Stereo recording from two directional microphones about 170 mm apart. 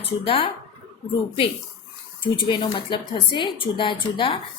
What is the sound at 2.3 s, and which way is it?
Speech, 30° left (ahead or behind).